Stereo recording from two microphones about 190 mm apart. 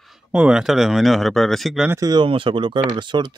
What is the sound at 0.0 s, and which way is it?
Speech, 5° right (ahead or behind).